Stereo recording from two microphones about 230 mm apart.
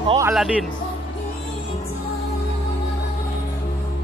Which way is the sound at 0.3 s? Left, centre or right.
Centre.